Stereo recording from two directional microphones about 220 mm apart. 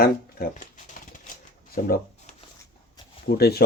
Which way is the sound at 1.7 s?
40° left (ahead or behind).